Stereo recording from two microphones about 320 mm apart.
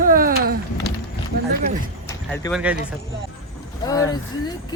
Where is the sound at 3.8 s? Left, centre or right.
Centre.